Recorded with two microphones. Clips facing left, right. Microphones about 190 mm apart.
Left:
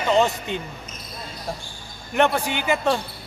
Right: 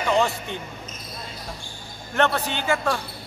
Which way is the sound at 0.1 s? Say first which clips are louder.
Left 3 dB; 20° left (ahead or behind).